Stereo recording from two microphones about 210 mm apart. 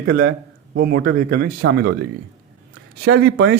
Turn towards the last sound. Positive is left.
turn(degrees=-55)  # may be behind; listen again after turning